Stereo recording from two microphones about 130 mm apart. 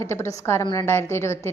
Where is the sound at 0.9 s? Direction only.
20° left (ahead or behind).